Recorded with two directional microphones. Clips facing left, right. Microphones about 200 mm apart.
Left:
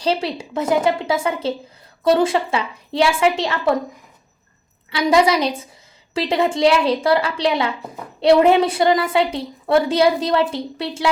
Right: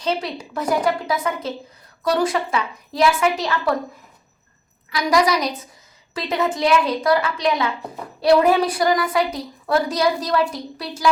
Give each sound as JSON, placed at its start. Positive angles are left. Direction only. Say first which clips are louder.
{"t": 0.0, "sound": "a woman's voice", "louder": "left 3 dB", "side_deg": 30}
{"t": 4.9, "sound": "a woman's voice", "louder": "left 3 dB", "side_deg": 25}